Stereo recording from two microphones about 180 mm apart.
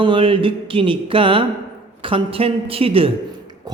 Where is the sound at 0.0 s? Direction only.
30° right (ahead or behind).